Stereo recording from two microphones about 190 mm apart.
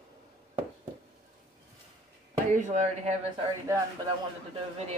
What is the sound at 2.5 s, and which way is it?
Speech, 40° right (ahead or behind).